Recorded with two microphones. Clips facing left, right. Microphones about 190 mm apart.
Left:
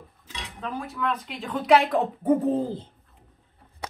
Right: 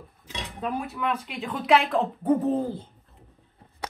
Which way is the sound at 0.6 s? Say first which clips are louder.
Right 2 dB; 15° right (ahead or behind).